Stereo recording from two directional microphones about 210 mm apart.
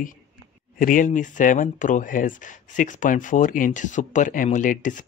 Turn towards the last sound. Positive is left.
turn(degrees=40)  # may be behind; listen again after turning